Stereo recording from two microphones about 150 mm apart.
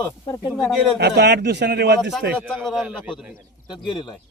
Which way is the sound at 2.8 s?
10° right (ahead or behind).